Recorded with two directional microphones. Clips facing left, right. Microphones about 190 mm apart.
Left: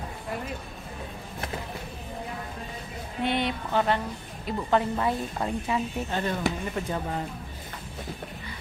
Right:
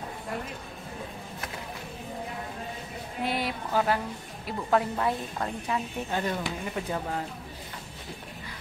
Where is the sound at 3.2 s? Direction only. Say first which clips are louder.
Left 3 dB; 5° right (ahead or behind).